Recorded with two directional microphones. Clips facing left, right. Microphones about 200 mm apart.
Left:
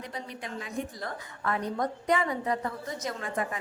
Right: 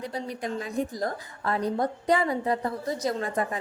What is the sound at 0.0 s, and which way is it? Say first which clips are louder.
A woman's voice: right 6 dB; 35° right (ahead or behind).